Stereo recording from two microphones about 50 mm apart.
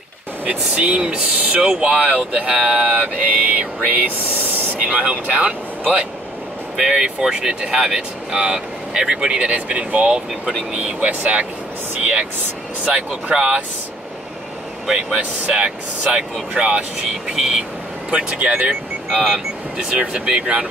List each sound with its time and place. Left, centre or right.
0.5 s speech: right
6.8 s speech: centre
15.1 s speech: right
17.3 s speech: centre
18.1 s speech: right